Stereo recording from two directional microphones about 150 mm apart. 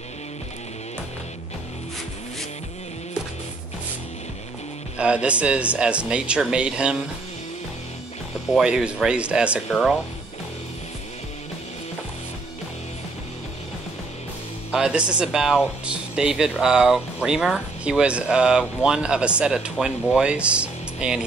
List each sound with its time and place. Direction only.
4.9 s speech: 5° right (ahead or behind)
8.5 s speech: 5° right (ahead or behind)
14.7 s speech: 5° right (ahead or behind)